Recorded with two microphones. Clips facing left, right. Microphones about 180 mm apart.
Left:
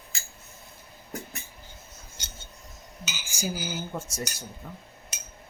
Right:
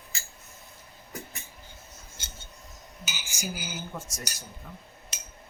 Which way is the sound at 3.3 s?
30° left (ahead or behind).